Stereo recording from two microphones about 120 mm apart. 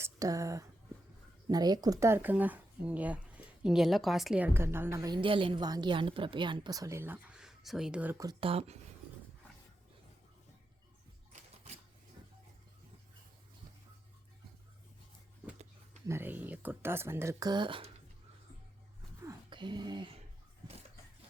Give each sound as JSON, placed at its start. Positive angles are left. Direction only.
{"t": 0.0, "sound": "speech", "side_deg": -30}
{"t": 4.4, "sound": "speech", "side_deg": -15}
{"t": 5.2, "sound": "a woman's voice", "side_deg": -45}
{"t": 8.4, "sound": "speech", "side_deg": -55}
{"t": 11.3, "sound": "typewriter", "side_deg": -65}
{"t": 16.0, "sound": "speech", "side_deg": -20}
{"t": 17.4, "sound": "speech", "side_deg": -40}
{"t": 19.5, "sound": "speech", "side_deg": -40}